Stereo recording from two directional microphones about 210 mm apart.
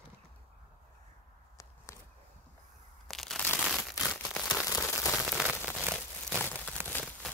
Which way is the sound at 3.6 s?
Centre (ahead or behind).